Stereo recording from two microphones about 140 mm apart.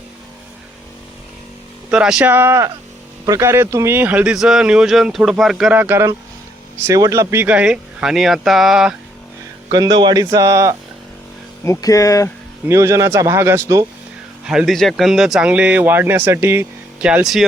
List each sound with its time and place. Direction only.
1.9 s speech: 5° right (ahead or behind)
5.7 s speech: 15° right (ahead or behind)
9.7 s speech: 30° right (ahead or behind)
11.6 s speech: 25° left (ahead or behind)
12.6 s speech: 20° right (ahead or behind)
14.4 s speech: 5° right (ahead or behind)
17.0 s speech: 5° right (ahead or behind)